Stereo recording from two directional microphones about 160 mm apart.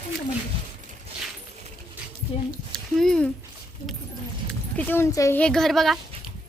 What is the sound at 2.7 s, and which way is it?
Speech, 5° left (ahead or behind).